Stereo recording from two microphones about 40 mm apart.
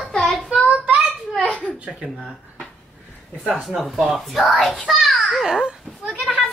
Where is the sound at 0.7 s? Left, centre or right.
Right.